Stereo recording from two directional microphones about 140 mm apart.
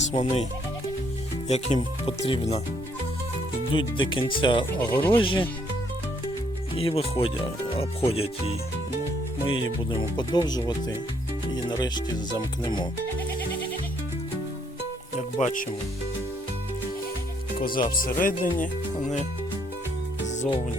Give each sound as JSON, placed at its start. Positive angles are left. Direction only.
{"t": 0.1, "sound": "speech", "side_deg": 50}
{"t": 1.5, "sound": "speech", "side_deg": 50}
{"t": 3.8, "sound": "speech", "side_deg": 35}
{"t": 4.9, "sound": "speech", "side_deg": 15}
{"t": 5.1, "sound": "speech", "side_deg": 40}
{"t": 6.7, "sound": "speech", "side_deg": 40}
{"t": 10.0, "sound": "speech", "side_deg": 30}
{"t": 15.4, "sound": "speech", "side_deg": 65}
{"t": 17.6, "sound": "speech", "side_deg": 90}
{"t": 20.2, "sound": "music", "side_deg": 60}